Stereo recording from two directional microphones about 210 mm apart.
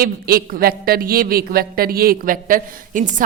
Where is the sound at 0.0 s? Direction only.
45° right (ahead or behind).